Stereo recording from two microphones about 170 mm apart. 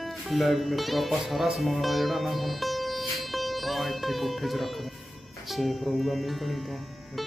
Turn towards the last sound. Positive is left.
turn(degrees=0)  # may be behind; listen again after turning